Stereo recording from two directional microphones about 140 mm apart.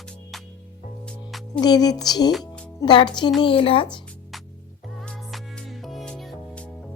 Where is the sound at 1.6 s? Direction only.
30° left (ahead or behind).